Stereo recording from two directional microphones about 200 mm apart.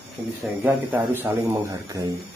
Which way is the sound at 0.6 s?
10° right (ahead or behind).